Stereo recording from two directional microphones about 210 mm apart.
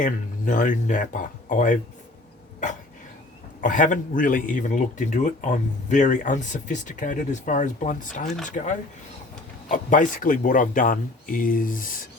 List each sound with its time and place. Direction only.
0.0 s speech: 40° left (ahead or behind)
3.6 s speech: 40° left (ahead or behind)